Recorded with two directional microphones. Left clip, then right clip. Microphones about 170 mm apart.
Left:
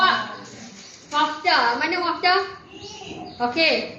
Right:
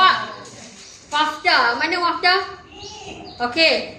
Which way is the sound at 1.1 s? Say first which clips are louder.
Right 2 dB; 25° right (ahead or behind).